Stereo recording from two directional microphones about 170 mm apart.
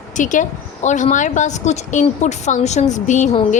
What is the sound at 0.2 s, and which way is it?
A woman's voice, 45° left (ahead or behind).